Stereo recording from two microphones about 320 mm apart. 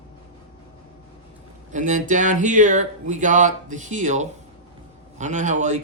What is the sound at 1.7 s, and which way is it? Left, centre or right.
Speech, right.